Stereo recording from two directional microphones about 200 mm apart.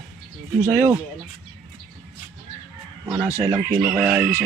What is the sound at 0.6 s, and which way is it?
Speech, 10° right (ahead or behind).